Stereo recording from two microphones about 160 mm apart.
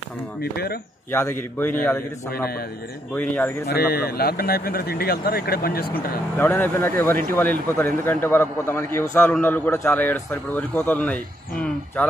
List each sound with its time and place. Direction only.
0.4 s speech: 75° left (ahead or behind)
3.2 s a man's voice: 10° left (ahead or behind)
3.6 s speech: 80° left
6.3 s a man's voice: 10° left (ahead or behind)